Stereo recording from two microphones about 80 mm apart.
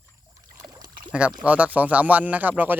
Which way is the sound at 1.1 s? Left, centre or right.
Centre.